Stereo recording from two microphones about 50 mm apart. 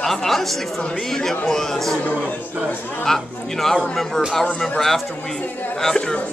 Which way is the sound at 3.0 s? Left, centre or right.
Centre.